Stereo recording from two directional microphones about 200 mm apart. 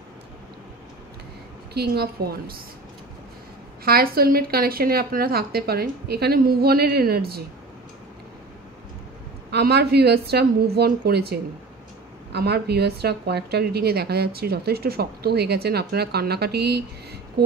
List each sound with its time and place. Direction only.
1.7 s a woman's voice: 55° right (ahead or behind)
3.8 s a woman's voice: 50° right (ahead or behind)
9.5 s a woman's voice: 55° right (ahead or behind)